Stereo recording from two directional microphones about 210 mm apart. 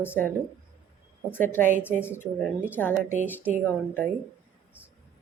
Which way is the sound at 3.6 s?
10° left (ahead or behind).